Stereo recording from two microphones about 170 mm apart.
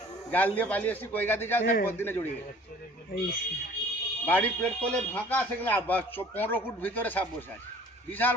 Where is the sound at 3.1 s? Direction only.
60° left (ahead or behind).